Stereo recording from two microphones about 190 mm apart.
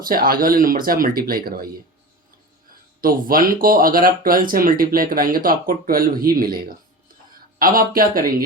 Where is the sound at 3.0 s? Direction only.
50° right (ahead or behind).